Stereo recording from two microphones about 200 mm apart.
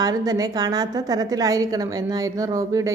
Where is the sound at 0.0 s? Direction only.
20° right (ahead or behind).